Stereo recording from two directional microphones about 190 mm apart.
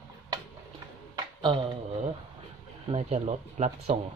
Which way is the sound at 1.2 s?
25° right (ahead or behind).